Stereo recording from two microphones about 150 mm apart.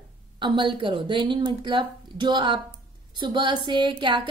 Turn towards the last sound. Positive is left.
turn(degrees=-30)  # may be behind; listen again after turning